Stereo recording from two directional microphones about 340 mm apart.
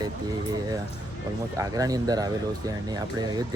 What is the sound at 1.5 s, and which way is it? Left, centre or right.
Speech, centre.